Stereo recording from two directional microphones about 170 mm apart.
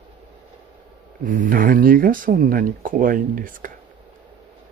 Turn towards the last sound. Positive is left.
turn(degrees=-55)  # may be behind; listen again after turning